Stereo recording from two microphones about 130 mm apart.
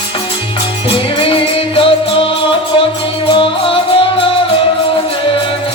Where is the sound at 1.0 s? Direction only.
45° left (ahead or behind).